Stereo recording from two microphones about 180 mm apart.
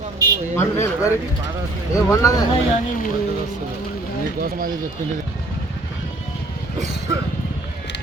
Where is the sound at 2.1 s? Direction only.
20° left (ahead or behind).